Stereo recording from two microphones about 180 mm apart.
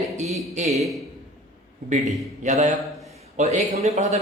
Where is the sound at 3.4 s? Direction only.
35° right (ahead or behind).